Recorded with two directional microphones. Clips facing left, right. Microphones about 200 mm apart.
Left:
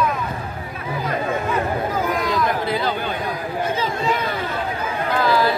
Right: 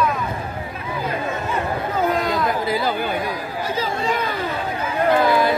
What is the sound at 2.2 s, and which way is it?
Chatter, 25° right (ahead or behind).